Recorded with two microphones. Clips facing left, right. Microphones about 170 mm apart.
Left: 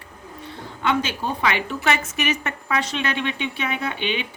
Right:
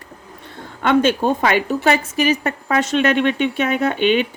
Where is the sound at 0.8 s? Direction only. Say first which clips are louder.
Right 8 dB; 50° right (ahead or behind).